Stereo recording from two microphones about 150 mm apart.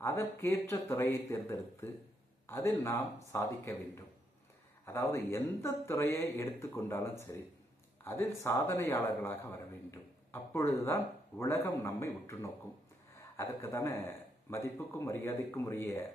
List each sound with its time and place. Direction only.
0.0 s speech: 15° left (ahead or behind)